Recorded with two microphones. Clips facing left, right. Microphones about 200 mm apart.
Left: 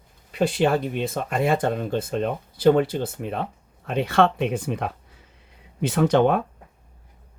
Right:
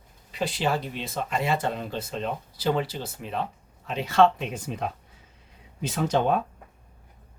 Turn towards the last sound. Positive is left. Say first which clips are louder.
# left 5 dB
turn(degrees=65)  # may be behind; listen again after turning